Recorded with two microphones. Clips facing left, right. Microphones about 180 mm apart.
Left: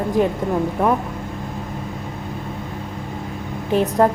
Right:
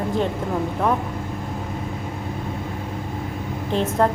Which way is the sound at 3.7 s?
10° left (ahead or behind).